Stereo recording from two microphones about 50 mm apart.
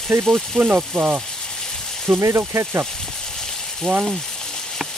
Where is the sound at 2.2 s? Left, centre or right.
Right.